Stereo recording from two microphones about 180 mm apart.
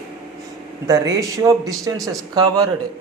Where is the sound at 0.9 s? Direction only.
20° right (ahead or behind).